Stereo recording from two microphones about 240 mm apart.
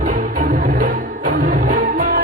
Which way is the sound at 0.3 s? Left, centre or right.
Right.